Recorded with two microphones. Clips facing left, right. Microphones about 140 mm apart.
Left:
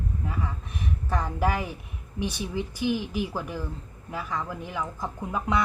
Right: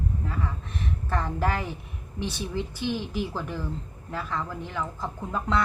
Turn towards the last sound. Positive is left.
turn(degrees=10)  # may be behind; listen again after turning